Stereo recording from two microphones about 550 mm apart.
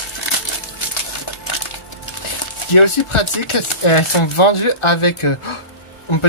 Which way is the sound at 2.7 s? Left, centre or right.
Left.